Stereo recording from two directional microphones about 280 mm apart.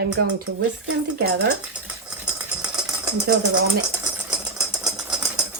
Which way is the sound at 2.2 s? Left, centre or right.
Centre.